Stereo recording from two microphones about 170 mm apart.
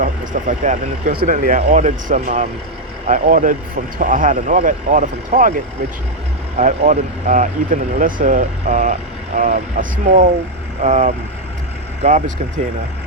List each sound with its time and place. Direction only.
0.0 s speech: 45° right (ahead or behind)